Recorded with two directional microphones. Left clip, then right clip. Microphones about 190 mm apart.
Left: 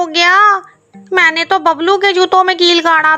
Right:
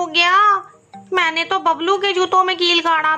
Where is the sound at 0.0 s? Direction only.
35° left (ahead or behind).